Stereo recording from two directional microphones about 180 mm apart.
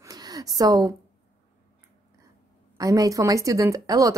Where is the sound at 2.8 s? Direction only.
20° right (ahead or behind).